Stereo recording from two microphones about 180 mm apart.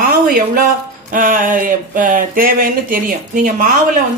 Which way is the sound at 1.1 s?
50° right (ahead or behind).